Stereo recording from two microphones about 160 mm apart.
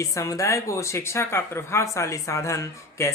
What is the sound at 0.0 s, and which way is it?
A woman's voice, 20° left (ahead or behind).